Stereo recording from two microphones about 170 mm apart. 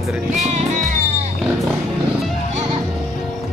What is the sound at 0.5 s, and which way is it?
Music, 45° right (ahead or behind).